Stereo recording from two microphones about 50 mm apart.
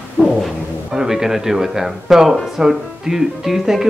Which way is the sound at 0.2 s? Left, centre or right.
Right.